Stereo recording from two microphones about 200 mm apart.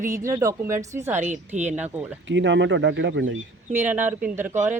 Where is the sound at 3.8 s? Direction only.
10° right (ahead or behind).